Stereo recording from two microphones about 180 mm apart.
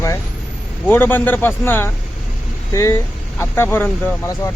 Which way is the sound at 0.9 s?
10° left (ahead or behind).